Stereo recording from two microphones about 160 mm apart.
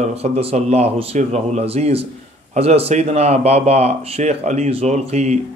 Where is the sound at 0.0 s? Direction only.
40° right (ahead or behind).